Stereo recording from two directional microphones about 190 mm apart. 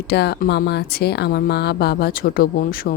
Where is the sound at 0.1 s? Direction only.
60° left (ahead or behind).